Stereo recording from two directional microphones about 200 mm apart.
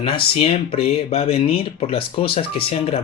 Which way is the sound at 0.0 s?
30° left (ahead or behind).